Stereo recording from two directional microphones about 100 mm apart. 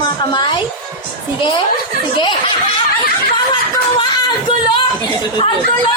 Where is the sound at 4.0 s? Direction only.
50° left (ahead or behind).